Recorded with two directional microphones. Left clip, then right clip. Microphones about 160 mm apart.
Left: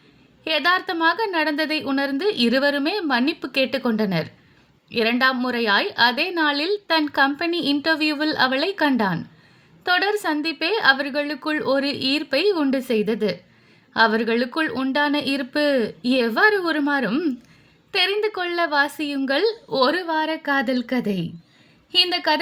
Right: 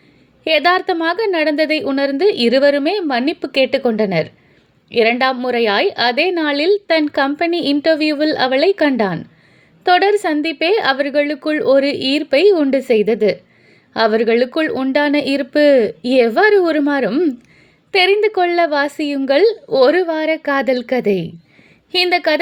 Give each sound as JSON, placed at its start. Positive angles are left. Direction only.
{"t": 0.4, "sound": "a woman's voice", "side_deg": -15}